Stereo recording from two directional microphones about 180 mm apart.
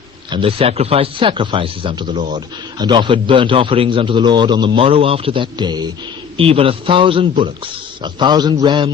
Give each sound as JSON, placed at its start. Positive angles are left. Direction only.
{"t": 0.3, "sound": "a man's voice", "side_deg": -30}